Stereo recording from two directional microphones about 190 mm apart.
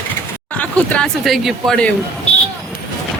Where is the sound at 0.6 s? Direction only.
5° left (ahead or behind).